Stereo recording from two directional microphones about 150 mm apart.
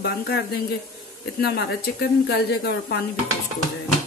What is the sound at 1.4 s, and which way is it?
A woman's voice, 90° left.